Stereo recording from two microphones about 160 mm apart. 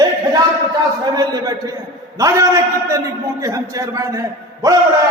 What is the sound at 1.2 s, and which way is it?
A man's voice, 25° right (ahead or behind).